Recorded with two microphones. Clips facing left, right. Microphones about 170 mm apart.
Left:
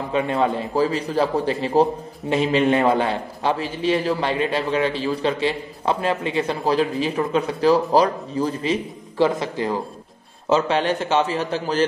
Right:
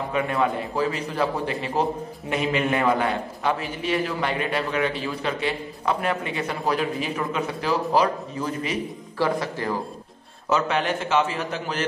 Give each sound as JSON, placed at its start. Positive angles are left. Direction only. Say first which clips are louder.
{"t": 0.1, "sound": "a man's voice", "louder": "left 4 dB", "side_deg": 25}
{"t": 9.2, "sound": "a man's voice", "louder": "left 4 dB", "side_deg": 20}